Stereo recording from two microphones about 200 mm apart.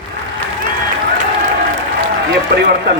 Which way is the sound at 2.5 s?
55° right (ahead or behind).